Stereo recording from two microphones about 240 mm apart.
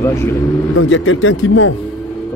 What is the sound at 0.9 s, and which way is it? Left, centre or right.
Speech, left.